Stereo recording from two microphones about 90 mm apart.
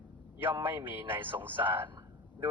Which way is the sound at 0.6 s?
20° right (ahead or behind).